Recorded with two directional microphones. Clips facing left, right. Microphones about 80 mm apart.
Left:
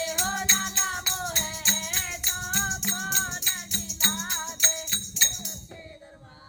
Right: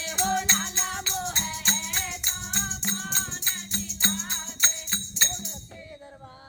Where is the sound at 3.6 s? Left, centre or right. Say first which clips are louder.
Right 3 dB; right.